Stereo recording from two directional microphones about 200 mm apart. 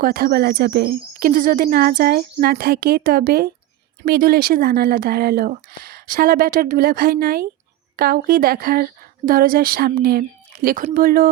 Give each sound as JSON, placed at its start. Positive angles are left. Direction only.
{"t": 0.0, "sound": "speech", "side_deg": -45}